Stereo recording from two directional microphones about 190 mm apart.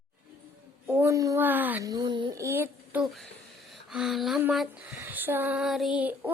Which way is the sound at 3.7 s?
Centre (ahead or behind).